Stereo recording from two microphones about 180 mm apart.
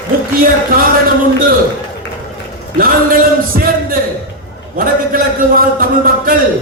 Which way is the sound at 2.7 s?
50° right (ahead or behind).